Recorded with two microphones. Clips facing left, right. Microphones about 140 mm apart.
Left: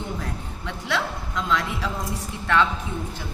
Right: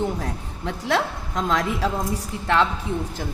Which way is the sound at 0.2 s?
40° right (ahead or behind).